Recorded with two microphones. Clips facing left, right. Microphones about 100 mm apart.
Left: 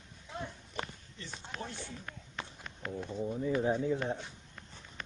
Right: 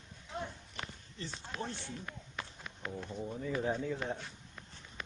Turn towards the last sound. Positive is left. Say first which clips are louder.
# left 4 dB
turn(degrees=15)  # may be behind; listen again after turning